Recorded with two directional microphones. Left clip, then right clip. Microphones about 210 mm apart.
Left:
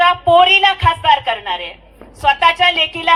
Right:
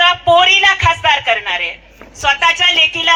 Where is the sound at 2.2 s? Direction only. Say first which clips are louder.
Even; 55° left (ahead or behind).